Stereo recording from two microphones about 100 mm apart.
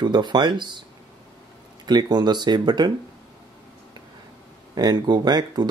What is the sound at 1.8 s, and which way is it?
Speech, 45° right (ahead or behind).